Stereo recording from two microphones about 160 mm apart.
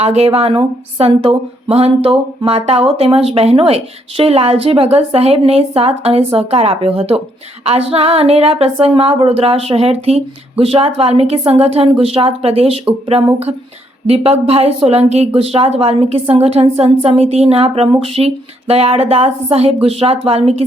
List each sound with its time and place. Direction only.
0.0 s a woman's voice: 40° right (ahead or behind)